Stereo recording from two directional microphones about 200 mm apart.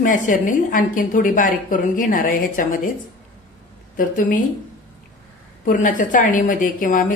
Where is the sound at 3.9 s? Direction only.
40° left (ahead or behind).